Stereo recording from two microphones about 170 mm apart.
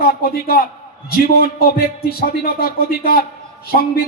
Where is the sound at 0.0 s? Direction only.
60° left (ahead or behind).